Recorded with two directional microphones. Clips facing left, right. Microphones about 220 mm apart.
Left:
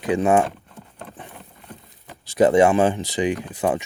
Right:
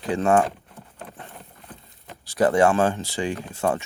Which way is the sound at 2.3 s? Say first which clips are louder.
Left 3 dB; 20° left (ahead or behind).